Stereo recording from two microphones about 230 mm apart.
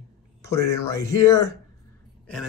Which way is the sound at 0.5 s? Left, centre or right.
Centre.